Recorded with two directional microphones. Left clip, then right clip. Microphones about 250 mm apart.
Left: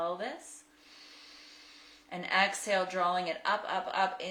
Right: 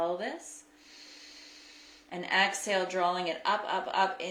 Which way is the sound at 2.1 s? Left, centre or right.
Centre.